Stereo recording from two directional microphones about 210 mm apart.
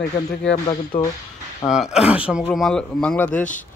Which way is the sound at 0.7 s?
20° left (ahead or behind).